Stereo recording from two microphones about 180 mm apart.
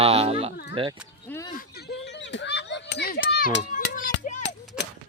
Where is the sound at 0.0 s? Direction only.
35° right (ahead or behind).